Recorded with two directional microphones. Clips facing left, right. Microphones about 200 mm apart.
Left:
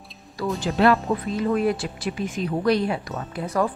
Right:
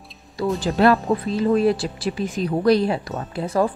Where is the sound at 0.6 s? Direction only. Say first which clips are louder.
Right 2 dB; 35° right (ahead or behind).